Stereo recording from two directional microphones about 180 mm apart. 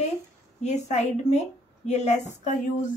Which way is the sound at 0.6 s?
40° left (ahead or behind).